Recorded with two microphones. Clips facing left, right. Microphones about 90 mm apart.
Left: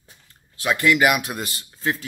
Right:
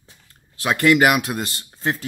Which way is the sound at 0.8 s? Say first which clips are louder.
Right 3 dB; 45° right (ahead or behind).